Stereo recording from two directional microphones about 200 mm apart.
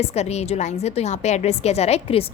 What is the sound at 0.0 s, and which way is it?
A woman's voice, 35° left (ahead or behind).